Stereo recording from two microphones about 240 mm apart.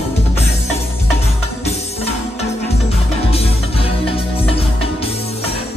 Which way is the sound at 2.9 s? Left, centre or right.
Left.